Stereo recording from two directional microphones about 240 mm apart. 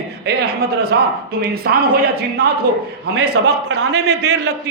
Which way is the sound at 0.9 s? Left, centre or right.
Right.